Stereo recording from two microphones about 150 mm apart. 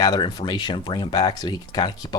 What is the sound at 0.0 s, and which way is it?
Speech, 25° left (ahead or behind).